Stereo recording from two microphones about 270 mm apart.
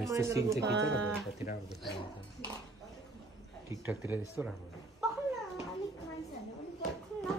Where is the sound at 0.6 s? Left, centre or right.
Right.